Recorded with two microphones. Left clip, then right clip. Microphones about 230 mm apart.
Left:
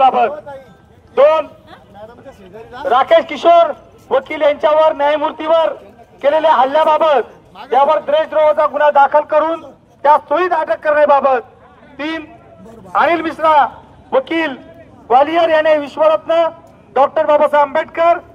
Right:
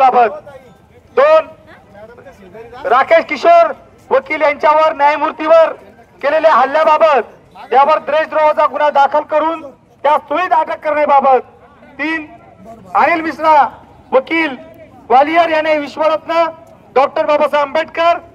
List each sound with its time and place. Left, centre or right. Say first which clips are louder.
0.0 s a sound: right 2 dB; right
1.1 s a man's voice: right 1 dB; right
2.8 s a man's voice: right 1 dB; right